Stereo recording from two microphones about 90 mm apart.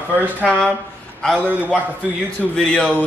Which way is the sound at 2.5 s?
10° left (ahead or behind).